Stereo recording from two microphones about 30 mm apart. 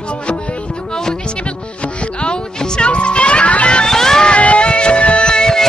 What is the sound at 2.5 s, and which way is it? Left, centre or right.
Music, left.